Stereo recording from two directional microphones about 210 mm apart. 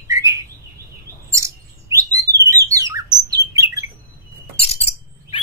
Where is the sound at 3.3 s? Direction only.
15° right (ahead or behind).